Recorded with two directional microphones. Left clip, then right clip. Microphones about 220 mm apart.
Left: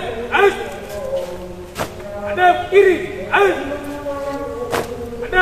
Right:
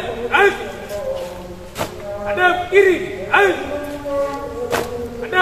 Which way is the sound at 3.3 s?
20° right (ahead or behind).